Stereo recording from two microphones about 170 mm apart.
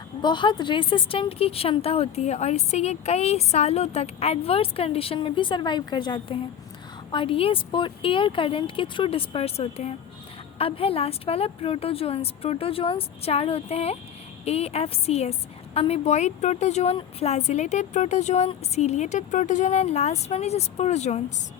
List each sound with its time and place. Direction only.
0.2 s a woman's voice: 25° left (ahead or behind)